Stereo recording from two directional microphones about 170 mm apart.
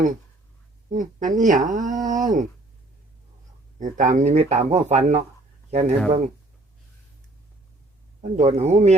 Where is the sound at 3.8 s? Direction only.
45° right (ahead or behind).